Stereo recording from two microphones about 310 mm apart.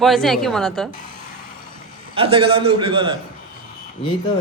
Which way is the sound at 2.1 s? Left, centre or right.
Centre.